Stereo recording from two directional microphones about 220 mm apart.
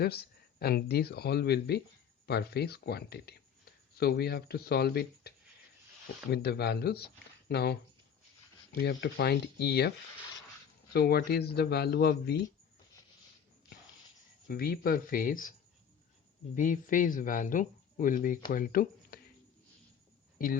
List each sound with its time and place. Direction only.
0.0 s speech: 45° left (ahead or behind)
6.3 s speech: 45° left (ahead or behind)
10.9 s speech: 45° left (ahead or behind)
14.4 s speech: 45° left (ahead or behind)
16.6 s speech: 35° left (ahead or behind)
20.4 s speech: 40° left (ahead or behind)